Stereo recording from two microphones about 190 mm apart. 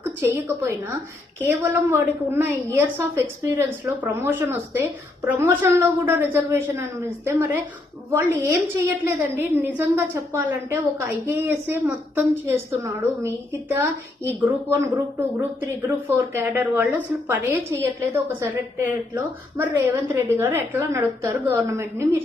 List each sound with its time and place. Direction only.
0.5 s a woman's voice: 10° right (ahead or behind)
15.6 s a woman's voice: 10° right (ahead or behind)